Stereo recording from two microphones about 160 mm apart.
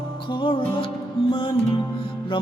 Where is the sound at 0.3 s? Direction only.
30° left (ahead or behind).